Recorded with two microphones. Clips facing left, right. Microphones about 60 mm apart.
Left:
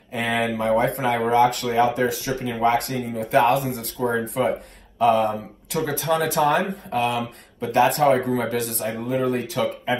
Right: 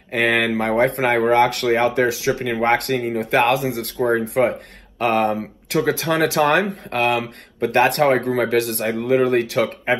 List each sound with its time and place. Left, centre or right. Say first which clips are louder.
0.1 s speech: right 5 dB; right